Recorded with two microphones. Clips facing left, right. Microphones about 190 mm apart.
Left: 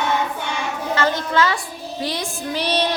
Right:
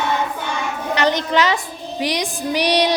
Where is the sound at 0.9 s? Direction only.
20° right (ahead or behind).